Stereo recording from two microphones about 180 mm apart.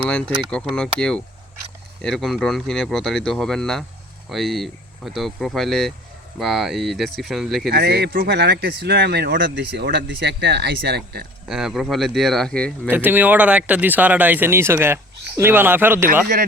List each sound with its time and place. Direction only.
0.1 s speech: 5° left (ahead or behind)
7.7 s speech: 65° right (ahead or behind)
11.4 s speech: centre (ahead or behind)
12.9 s speech: 10° right (ahead or behind)